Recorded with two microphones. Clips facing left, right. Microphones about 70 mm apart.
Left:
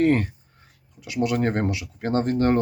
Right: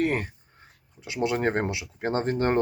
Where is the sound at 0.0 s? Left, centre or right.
Centre.